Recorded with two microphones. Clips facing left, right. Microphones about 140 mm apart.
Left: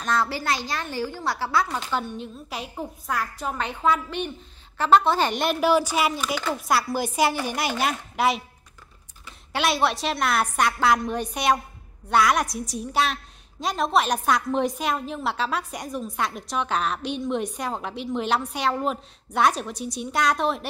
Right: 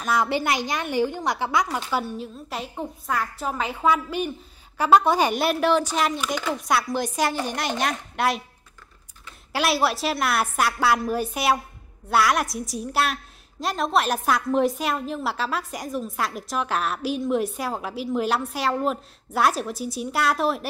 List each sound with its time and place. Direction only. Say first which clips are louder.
0.0 s a woman's voice: right 2 dB; 10° right (ahead or behind)
9.5 s a woman's voice: right 1 dB; 5° right (ahead or behind)